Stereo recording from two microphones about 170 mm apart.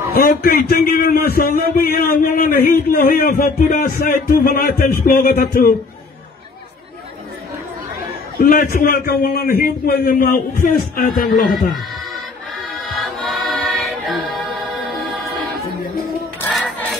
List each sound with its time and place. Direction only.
0.1 s a man's voice: 60° left (ahead or behind)
8.4 s a man's voice: 55° left (ahead or behind)
12.9 s music: centre (ahead or behind)
16.5 s a sound: centre (ahead or behind)